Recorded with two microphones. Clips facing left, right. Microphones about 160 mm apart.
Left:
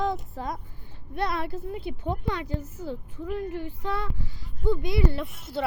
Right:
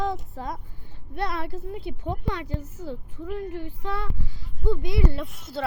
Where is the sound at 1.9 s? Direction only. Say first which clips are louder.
Left 1 dB; 10° left (ahead or behind).